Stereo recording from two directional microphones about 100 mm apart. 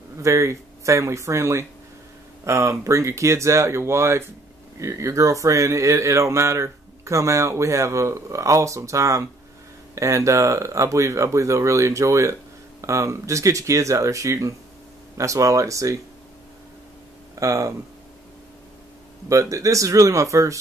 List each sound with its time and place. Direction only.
0.2 s speech: 30° right (ahead or behind)
17.4 s speech: 30° right (ahead or behind)
19.2 s speech: 35° right (ahead or behind)